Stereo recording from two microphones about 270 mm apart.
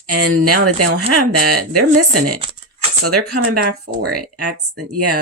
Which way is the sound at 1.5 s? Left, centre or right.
Right.